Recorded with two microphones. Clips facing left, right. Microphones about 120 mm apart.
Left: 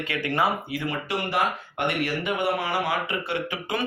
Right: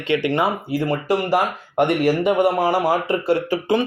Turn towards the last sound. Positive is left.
turn(degrees=-40)  # may be behind; listen again after turning